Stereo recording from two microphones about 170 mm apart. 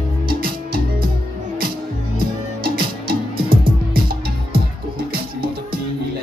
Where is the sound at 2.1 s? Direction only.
60° right (ahead or behind).